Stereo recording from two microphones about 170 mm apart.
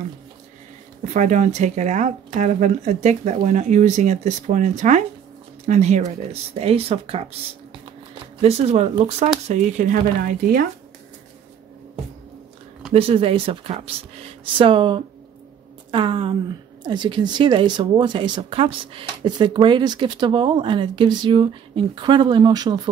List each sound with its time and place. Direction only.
1.0 s speech: 45° right (ahead or behind)
12.9 s speech: 35° right (ahead or behind)